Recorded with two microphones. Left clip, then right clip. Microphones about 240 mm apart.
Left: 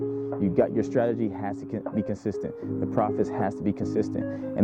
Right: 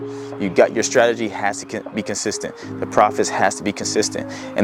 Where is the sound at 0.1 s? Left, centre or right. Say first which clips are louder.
Right 3 dB; centre.